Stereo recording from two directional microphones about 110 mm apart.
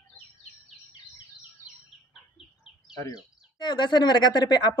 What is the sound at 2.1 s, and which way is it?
Bird, 5° right (ahead or behind).